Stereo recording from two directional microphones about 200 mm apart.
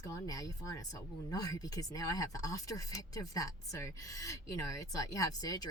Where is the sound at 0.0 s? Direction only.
15° left (ahead or behind).